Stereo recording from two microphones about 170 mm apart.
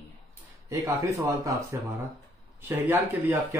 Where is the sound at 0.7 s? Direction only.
20° right (ahead or behind).